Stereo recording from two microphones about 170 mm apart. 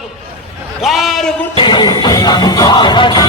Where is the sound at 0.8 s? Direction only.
Centre (ahead or behind).